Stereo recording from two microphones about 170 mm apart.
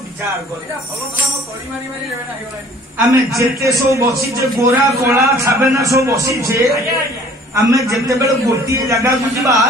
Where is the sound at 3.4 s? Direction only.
20° right (ahead or behind).